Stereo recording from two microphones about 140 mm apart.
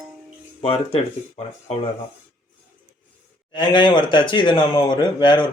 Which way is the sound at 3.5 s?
35° left (ahead or behind).